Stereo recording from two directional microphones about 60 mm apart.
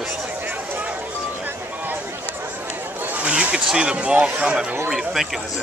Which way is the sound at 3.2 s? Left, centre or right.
Right.